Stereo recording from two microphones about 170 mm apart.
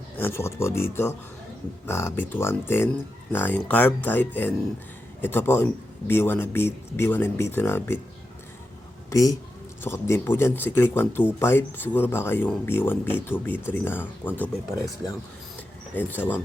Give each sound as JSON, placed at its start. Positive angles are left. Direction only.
{"t": 0.2, "sound": "speech", "side_deg": 15}
{"t": 9.0, "sound": "speech", "side_deg": 20}
{"t": 16.0, "sound": "speech", "side_deg": 10}